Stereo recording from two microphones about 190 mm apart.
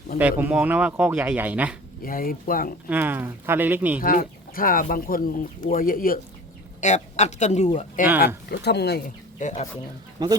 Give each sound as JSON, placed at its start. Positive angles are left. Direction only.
{"t": 0.2, "sound": "speech", "side_deg": -10}
{"t": 2.0, "sound": "speech", "side_deg": 50}
{"t": 2.9, "sound": "speech", "side_deg": -10}
{"t": 4.0, "sound": "speech", "side_deg": 45}
{"t": 6.8, "sound": "speech", "side_deg": 40}
{"t": 8.4, "sound": "speech", "side_deg": 60}
{"t": 9.4, "sound": "speech", "side_deg": 40}
{"t": 10.2, "sound": "speech", "side_deg": -20}